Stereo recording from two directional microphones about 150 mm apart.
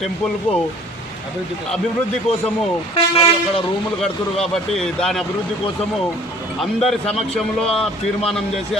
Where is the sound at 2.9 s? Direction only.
40° left (ahead or behind).